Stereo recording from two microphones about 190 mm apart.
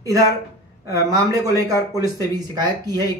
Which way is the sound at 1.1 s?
15° right (ahead or behind).